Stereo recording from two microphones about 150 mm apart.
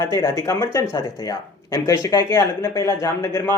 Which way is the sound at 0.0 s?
20° left (ahead or behind).